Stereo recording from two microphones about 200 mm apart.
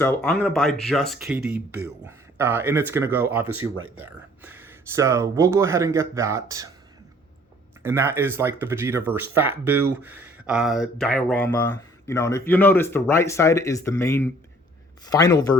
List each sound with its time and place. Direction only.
0.0 s speech: 5° left (ahead or behind)
1.7 s speech: 10° right (ahead or behind)
7.8 s speech: 10° right (ahead or behind); by 15.5 s 20° left (ahead or behind)